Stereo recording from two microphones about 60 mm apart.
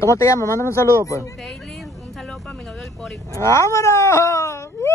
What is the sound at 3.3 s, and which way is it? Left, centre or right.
Speech, left.